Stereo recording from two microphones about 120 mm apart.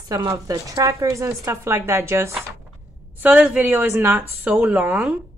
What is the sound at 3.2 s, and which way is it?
Speech, 10° right (ahead or behind).